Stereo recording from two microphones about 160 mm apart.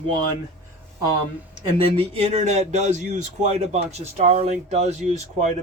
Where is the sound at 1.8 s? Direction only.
35° right (ahead or behind).